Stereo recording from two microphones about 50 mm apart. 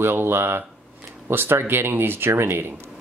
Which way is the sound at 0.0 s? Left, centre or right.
Right.